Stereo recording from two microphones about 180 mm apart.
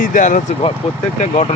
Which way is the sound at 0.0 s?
45° left (ahead or behind).